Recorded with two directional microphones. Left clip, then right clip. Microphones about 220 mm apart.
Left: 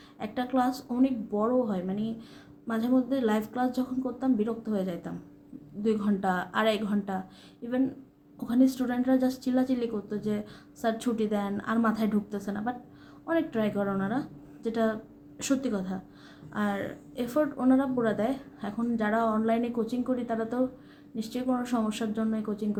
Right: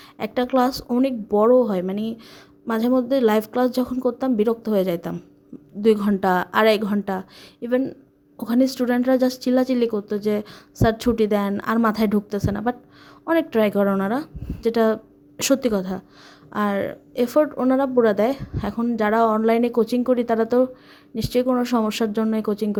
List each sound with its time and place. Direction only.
0.2 s speech: 45° right (ahead or behind)